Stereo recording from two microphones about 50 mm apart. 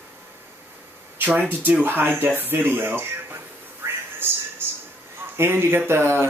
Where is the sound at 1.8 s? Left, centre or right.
Right.